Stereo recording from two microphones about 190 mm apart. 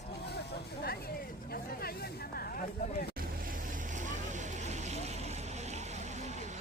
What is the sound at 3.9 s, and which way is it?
Vehicle, 40° right (ahead or behind).